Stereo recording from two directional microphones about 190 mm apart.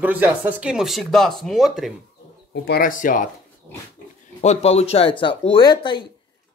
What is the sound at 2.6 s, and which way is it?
Speech, 50° left (ahead or behind).